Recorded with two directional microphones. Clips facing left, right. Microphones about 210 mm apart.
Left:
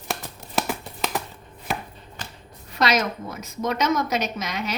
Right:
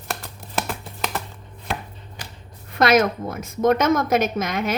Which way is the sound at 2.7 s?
50° right (ahead or behind).